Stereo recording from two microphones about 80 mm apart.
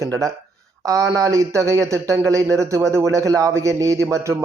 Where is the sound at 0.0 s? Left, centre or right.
Right.